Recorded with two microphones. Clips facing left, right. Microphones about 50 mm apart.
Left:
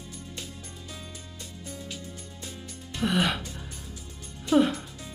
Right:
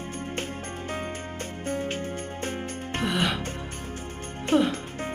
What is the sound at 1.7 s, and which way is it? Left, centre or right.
Music, right.